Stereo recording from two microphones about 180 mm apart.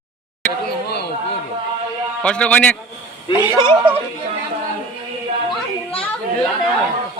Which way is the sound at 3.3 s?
30° left (ahead or behind).